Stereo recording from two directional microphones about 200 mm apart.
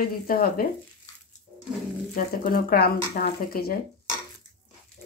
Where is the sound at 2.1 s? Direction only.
45° left (ahead or behind).